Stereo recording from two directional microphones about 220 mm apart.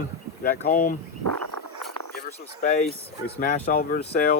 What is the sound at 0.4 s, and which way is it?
Speech, 35° left (ahead or behind).